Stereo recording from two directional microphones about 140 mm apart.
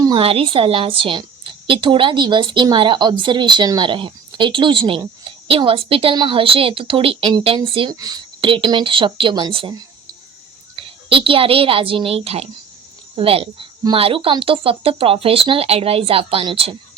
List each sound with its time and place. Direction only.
0.2 s speech: 40° right (ahead or behind)
7.9 s speech: 30° right (ahead or behind)
10.8 s a woman's voice: 40° right (ahead or behind)